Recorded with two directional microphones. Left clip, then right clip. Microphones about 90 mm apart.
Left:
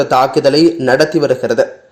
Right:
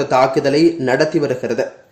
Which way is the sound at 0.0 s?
15° left (ahead or behind).